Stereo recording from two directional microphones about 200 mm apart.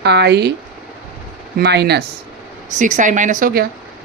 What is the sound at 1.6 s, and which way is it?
Speech, 55° right (ahead or behind).